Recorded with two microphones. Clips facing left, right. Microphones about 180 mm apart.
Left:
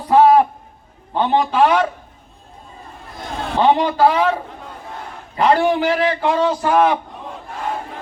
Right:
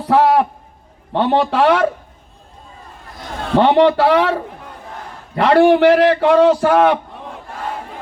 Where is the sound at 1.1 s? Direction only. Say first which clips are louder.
Right 2 dB; 75° right (ahead or behind).